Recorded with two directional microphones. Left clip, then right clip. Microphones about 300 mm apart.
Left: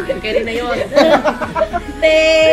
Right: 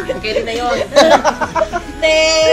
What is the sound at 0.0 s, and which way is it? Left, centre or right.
Speech, centre.